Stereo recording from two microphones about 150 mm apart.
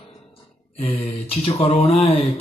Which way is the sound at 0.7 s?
35° left (ahead or behind).